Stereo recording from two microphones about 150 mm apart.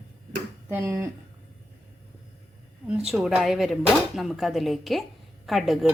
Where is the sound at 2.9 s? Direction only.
5° right (ahead or behind).